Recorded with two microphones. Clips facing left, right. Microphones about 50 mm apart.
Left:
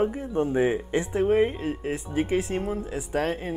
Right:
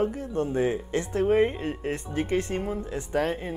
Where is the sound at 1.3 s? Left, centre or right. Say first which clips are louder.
Right 1 dB; centre.